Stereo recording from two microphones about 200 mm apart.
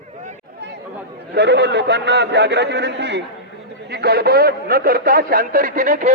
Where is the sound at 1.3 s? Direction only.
60° right (ahead or behind).